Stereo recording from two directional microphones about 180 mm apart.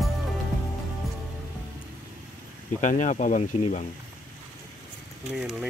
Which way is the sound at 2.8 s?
45° left (ahead or behind).